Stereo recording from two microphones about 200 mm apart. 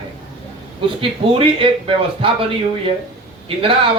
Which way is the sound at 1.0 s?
25° right (ahead or behind).